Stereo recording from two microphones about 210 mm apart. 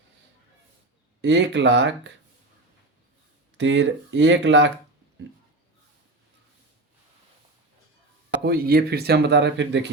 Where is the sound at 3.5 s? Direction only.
60° right (ahead or behind).